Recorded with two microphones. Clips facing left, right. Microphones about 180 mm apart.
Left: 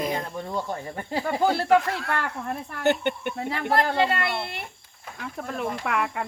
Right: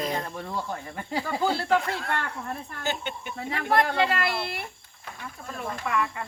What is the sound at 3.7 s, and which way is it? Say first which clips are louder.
Speech: left 1 dB; 30° left (ahead or behind).